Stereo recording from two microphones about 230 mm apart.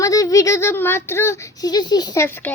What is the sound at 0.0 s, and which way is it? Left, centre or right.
Speech, centre.